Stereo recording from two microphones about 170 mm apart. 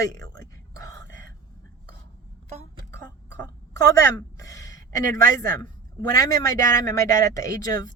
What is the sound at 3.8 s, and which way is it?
A woman's voice, 20° left (ahead or behind).